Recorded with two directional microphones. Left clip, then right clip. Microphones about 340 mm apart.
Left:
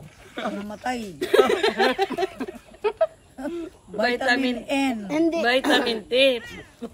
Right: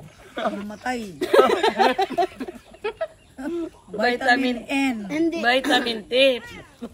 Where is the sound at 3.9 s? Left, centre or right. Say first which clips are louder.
Right 2 dB; centre.